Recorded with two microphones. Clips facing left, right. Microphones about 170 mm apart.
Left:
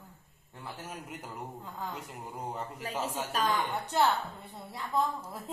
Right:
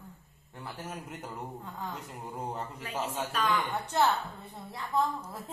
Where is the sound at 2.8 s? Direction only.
40° left (ahead or behind).